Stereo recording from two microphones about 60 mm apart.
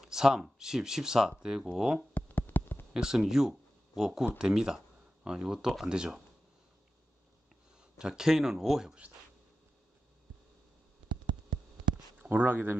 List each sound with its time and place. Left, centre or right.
0.0 s speech: centre
2.1 s a sound: left
2.9 s speech: centre
8.0 s speech: centre
12.2 s speech: right